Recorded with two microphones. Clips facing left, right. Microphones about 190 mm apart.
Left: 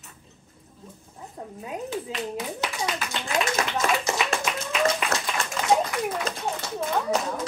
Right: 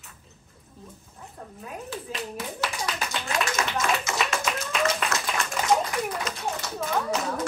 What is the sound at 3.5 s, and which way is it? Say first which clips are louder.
Clapping: left 2 dB; 35° left (ahead or behind).